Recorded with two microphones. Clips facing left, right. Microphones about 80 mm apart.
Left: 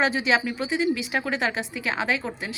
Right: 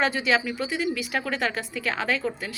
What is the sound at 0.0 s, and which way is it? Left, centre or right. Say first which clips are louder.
Speech: left 1 dB; left.